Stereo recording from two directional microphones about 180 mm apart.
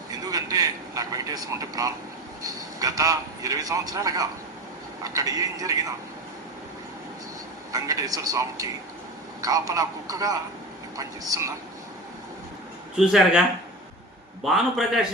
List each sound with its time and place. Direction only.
0.2 s a man's voice: 20° right (ahead or behind)
7.7 s a man's voice: 20° right (ahead or behind)
13.0 s speech: centre (ahead or behind)
14.4 s speech: centre (ahead or behind)